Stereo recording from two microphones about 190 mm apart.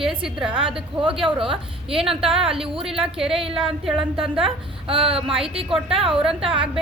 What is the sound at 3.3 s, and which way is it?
Speech, 30° right (ahead or behind).